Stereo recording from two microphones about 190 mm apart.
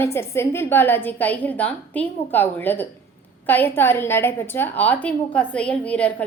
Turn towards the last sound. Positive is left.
turn(degrees=5)  # may be behind; listen again after turning